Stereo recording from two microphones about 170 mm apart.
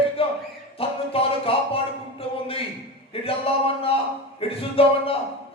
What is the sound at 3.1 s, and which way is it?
Music, 35° left (ahead or behind).